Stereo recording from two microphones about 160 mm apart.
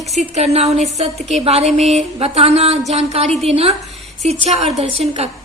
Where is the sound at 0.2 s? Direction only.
45° right (ahead or behind).